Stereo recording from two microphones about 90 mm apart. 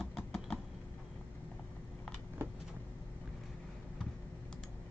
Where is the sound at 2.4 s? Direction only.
30° right (ahead or behind).